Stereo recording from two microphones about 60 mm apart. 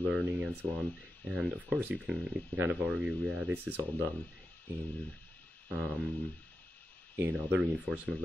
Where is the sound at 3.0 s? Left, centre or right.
Right.